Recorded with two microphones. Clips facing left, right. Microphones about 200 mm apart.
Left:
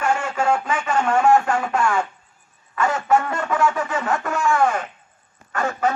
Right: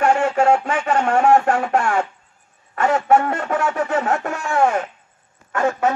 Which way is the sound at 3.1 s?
60° right (ahead or behind).